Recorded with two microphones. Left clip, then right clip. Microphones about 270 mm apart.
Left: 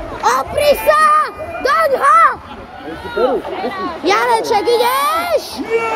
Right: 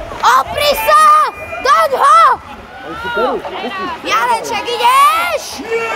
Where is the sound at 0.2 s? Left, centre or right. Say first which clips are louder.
Right 3 dB; centre.